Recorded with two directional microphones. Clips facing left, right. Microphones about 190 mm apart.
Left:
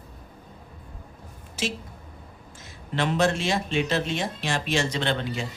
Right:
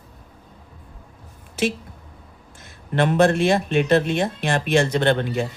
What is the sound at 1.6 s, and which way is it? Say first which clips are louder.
Speech: right 7 dB; 60° right (ahead or behind).